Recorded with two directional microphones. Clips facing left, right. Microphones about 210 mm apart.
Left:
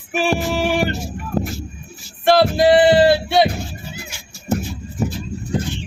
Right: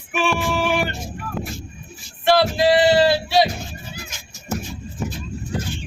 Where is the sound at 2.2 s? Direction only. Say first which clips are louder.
Left 3 dB; 50° left (ahead or behind).